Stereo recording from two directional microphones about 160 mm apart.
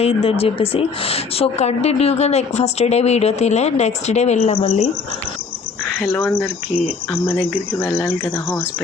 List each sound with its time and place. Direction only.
0.0 s a woman's voice: 35° left (ahead or behind)
6.0 s speech: 10° left (ahead or behind)
7.8 s speech: 15° left (ahead or behind)